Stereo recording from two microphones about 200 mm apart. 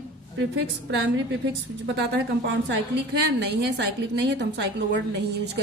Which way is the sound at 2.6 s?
60° right (ahead or behind).